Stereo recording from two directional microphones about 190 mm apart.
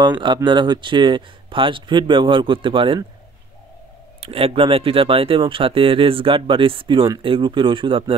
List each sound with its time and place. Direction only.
0.2 s speech: 25° right (ahead or behind)
4.2 s speech: 30° right (ahead or behind)